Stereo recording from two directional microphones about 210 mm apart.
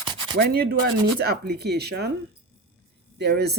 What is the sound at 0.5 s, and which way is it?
Speech, 50° right (ahead or behind).